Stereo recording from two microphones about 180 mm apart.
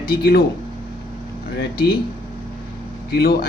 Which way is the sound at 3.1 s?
60° left (ahead or behind).